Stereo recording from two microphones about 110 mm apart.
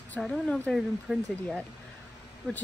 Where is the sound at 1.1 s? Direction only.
5° right (ahead or behind).